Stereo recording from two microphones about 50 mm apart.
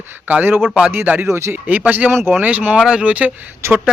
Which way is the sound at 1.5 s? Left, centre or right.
Right.